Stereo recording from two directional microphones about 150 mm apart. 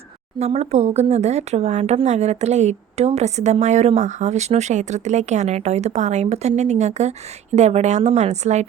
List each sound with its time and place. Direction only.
0.3 s speech: 45° right (ahead or behind)